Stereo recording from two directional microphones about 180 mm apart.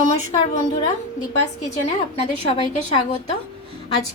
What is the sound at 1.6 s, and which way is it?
Speech, 35° left (ahead or behind).